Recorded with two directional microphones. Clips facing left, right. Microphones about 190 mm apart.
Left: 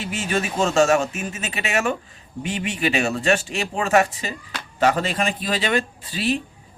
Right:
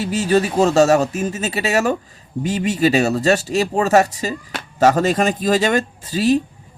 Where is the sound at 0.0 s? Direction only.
40° right (ahead or behind).